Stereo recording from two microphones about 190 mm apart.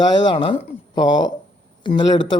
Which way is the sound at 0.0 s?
25° left (ahead or behind).